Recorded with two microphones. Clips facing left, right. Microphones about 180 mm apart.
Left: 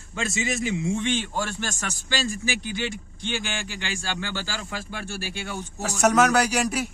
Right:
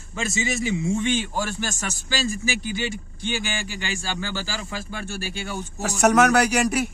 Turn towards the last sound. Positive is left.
turn(degrees=-60)  # may be behind; listen again after turning